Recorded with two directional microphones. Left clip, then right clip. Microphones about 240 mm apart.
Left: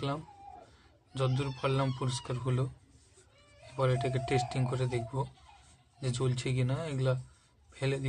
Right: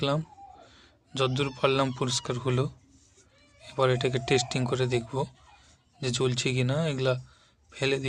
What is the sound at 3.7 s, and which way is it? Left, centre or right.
Speech, right.